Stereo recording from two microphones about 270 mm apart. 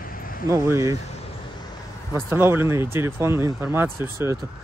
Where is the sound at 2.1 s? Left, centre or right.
Centre.